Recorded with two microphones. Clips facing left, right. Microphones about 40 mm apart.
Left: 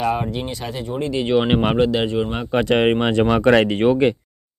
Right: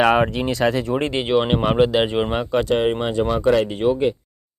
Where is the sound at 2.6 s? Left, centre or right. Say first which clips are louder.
Left 3 dB; left.